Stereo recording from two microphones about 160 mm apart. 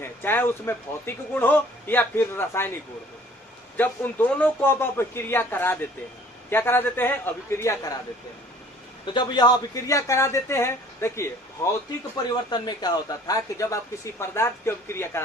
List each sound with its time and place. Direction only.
0.0 s speech: 15° left (ahead or behind)
3.8 s speech: 10° left (ahead or behind)
9.1 s speech: 25° left (ahead or behind)